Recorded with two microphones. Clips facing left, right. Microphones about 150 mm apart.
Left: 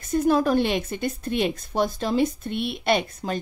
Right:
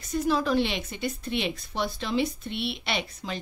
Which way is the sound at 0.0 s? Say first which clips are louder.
Left 6 dB; 50° left (ahead or behind).